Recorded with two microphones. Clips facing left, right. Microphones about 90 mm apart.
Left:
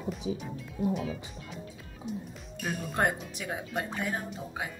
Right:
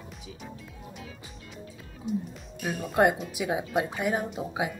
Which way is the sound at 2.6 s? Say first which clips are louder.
Right 6 dB; 5° right (ahead or behind).